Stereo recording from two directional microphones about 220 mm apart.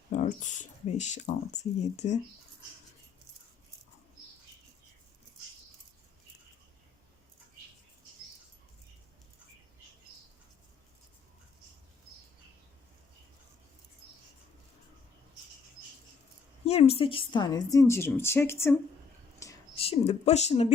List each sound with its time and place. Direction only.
0.1 s speech: 35° left (ahead or behind)
16.6 s a woman's voice: 30° left (ahead or behind); by 18.8 s 10° left (ahead or behind)
19.7 s speech: 25° left (ahead or behind)